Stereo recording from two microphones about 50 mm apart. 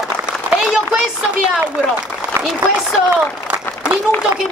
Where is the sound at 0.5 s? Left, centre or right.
Centre.